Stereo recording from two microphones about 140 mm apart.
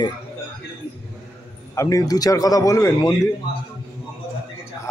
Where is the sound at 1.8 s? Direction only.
25° left (ahead or behind).